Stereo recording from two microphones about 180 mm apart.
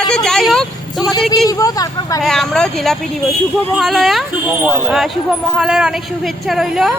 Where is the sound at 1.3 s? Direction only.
20° left (ahead or behind).